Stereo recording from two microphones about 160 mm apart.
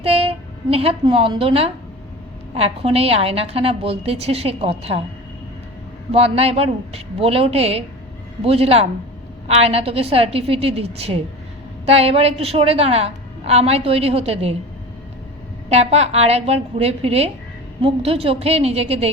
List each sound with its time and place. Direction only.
0.0 s a woman's voice: 35° right (ahead or behind)
6.1 s a woman's voice: 40° right (ahead or behind)
15.7 s a woman's voice: 40° right (ahead or behind)